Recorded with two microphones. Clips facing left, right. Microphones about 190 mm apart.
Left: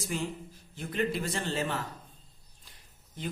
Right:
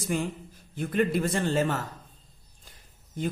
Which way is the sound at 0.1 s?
55° right (ahead or behind).